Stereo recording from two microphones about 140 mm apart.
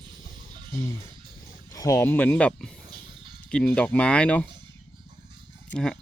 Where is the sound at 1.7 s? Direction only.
20° left (ahead or behind).